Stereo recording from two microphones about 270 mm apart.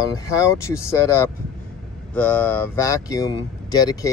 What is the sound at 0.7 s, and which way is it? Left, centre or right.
Speech, centre.